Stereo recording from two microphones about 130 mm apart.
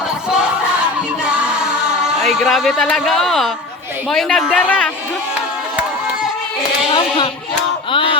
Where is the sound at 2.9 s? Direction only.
Centre (ahead or behind).